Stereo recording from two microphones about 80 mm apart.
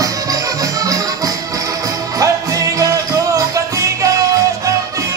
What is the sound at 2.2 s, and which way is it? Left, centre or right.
Music, right.